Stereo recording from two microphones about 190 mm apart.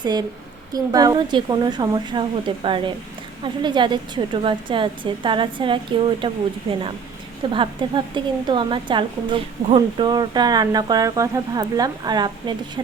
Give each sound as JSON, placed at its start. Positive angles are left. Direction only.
{"t": 0.0, "sound": "a woman's voice", "side_deg": -20}